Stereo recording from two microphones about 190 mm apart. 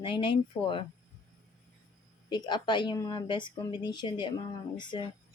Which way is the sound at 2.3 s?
25° left (ahead or behind).